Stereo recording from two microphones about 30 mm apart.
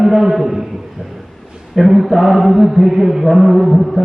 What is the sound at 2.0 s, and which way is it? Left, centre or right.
Mantra, centre.